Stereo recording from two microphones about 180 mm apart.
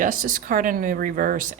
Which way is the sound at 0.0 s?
50° right (ahead or behind).